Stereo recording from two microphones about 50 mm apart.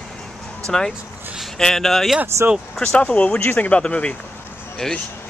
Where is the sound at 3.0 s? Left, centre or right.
Left.